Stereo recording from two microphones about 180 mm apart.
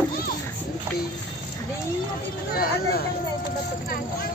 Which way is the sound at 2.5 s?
55° left (ahead or behind).